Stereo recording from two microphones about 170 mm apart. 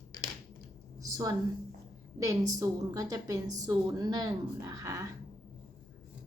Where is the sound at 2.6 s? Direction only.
20° right (ahead or behind).